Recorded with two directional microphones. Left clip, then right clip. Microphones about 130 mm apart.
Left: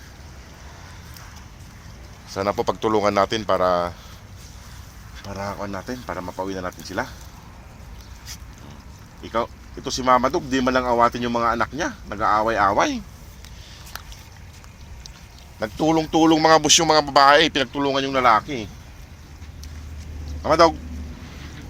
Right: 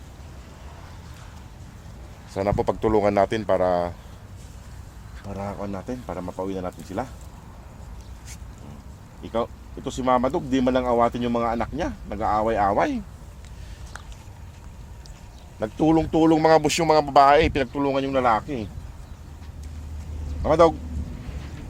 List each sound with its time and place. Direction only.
2.3 s speech: 35° right (ahead or behind)
5.5 s speech: 5° right (ahead or behind)
6.5 s speech: 15° right (ahead or behind)
9.2 s boat: 20° right (ahead or behind)
10.0 s speech: 20° right (ahead or behind)
15.6 s speech: 35° right (ahead or behind)
16.1 s speech: 20° right (ahead or behind)
20.5 s speech: 15° right (ahead or behind)